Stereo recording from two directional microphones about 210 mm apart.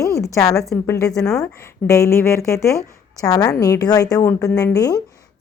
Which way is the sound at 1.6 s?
15° left (ahead or behind).